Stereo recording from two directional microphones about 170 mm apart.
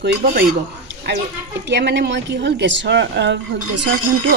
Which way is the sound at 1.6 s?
90° right.